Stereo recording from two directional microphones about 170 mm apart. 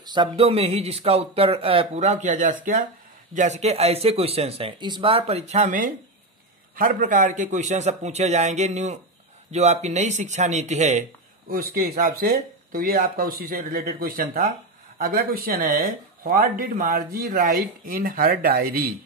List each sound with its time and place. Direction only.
0.0 s a man's voice: 25° right (ahead or behind); by 18.9 s 60° right (ahead or behind)